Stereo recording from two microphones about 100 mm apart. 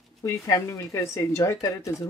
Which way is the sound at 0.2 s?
30° left (ahead or behind).